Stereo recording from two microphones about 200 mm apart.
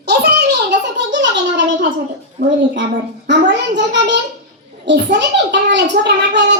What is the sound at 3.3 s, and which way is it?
A child's voice, 60° right (ahead or behind).